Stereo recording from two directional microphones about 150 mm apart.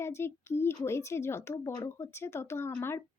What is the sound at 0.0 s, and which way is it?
Speech, 15° left (ahead or behind).